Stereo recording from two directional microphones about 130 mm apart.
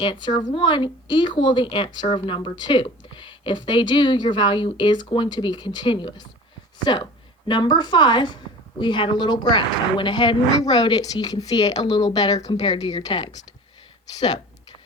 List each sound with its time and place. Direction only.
0.0 s a woman's voice: 35° left (ahead or behind)